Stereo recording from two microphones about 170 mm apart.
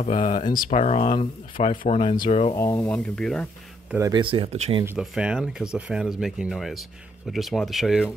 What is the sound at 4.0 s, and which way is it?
Speech, 25° right (ahead or behind).